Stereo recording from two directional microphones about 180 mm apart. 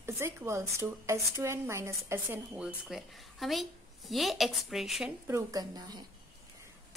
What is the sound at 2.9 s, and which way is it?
A woman's voice, centre (ahead or behind).